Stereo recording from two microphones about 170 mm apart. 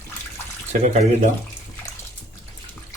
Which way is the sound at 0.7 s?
40° right (ahead or behind).